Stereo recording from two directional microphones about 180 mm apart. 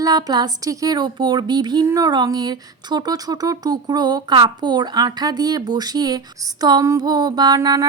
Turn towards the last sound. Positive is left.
turn(degrees=-20)  # may be behind; listen again after turning